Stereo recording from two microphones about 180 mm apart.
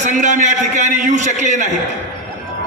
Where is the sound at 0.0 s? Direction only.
45° right (ahead or behind).